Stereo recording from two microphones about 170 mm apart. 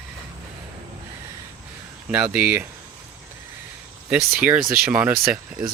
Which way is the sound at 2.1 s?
10° right (ahead or behind).